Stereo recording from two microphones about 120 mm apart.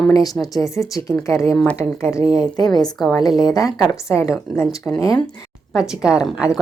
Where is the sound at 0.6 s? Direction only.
30° left (ahead or behind).